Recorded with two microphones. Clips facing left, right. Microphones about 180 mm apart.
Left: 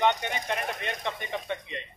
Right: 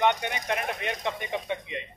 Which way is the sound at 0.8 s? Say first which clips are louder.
Right 2 dB; 15° right (ahead or behind).